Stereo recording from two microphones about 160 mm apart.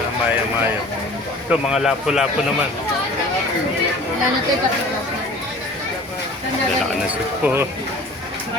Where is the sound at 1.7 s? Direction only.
Centre (ahead or behind).